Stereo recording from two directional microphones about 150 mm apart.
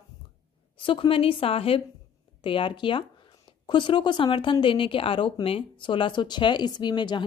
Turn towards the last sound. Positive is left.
turn(degrees=30)  # may be behind; listen again after turning